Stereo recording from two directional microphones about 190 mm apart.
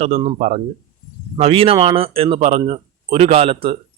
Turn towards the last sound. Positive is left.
turn(degrees=-30)  # may be behind; listen again after turning